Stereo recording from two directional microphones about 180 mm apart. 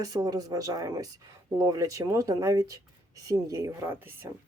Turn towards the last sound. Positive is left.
turn(degrees=-15)  # may be behind; listen again after turning